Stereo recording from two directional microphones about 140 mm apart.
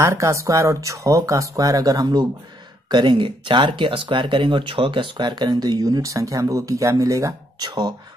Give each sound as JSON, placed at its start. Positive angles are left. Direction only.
{"t": 0.0, "sound": "speech", "side_deg": -20}